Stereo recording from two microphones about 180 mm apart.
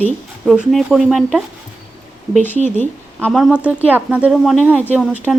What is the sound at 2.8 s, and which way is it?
Speech, 5° left (ahead or behind).